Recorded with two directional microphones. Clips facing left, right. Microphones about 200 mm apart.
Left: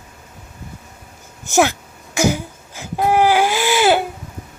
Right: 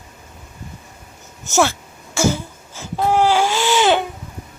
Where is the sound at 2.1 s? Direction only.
15° left (ahead or behind).